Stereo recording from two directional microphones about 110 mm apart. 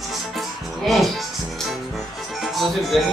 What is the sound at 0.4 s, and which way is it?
Music, centre (ahead or behind).